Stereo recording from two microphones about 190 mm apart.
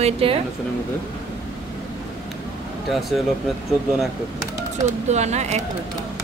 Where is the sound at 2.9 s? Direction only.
Centre (ahead or behind).